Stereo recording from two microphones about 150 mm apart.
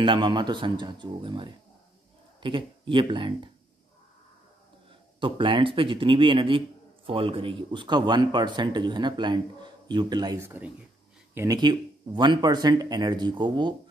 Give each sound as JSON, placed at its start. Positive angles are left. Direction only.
{"t": 0.0, "sound": "speech", "side_deg": -30}
{"t": 5.2, "sound": "speech", "side_deg": -35}
{"t": 10.4, "sound": "speech", "side_deg": -15}
{"t": 11.3, "sound": "speech", "side_deg": -25}